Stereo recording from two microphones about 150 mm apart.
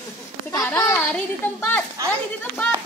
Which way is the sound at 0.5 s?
15° left (ahead or behind).